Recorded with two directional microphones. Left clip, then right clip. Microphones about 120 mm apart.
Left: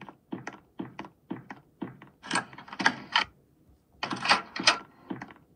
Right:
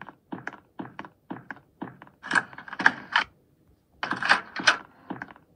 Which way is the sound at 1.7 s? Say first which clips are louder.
Left 3 dB; 45° right (ahead or behind).